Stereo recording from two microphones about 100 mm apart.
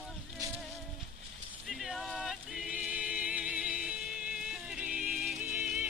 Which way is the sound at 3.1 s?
10° right (ahead or behind).